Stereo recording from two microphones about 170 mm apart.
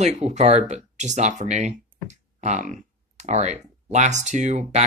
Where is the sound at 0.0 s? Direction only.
40° right (ahead or behind).